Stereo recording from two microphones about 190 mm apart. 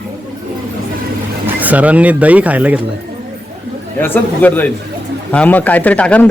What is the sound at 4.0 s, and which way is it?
Speech, 10° left (ahead or behind).